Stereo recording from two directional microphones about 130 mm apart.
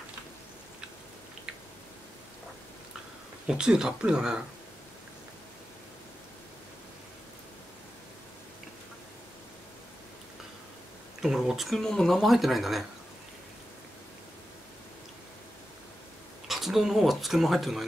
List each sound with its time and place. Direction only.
3.4 s speech: 5° right (ahead or behind)
11.1 s speech: 5° right (ahead or behind)
16.4 s speech: centre (ahead or behind)